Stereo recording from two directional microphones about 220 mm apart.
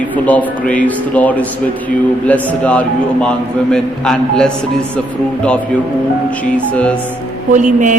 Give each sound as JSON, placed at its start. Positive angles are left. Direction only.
{"t": 0.3, "sound": "a man's voice", "side_deg": 5}
{"t": 7.5, "sound": "a man's voice", "side_deg": -35}